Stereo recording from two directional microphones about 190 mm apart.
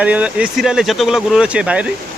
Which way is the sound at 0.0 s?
5° right (ahead or behind).